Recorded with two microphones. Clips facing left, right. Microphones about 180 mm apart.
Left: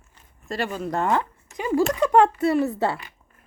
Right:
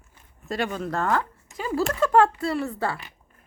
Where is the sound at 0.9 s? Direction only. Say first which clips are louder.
Left 4 dB; 20° left (ahead or behind).